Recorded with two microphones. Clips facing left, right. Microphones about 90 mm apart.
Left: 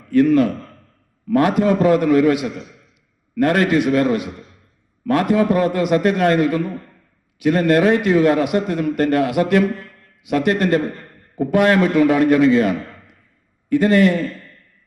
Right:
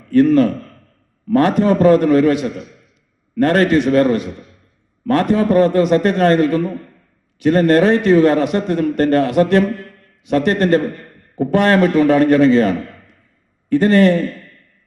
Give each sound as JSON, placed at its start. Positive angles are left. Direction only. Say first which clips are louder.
{"t": 0.1, "sound": "a man's voice", "louder": "right 2 dB", "side_deg": -35}